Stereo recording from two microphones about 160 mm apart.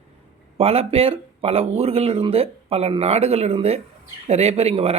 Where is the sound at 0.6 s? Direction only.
40° right (ahead or behind).